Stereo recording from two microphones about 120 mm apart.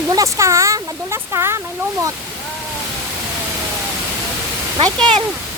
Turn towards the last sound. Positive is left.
turn(degrees=-45)  # may be behind; listen again after turning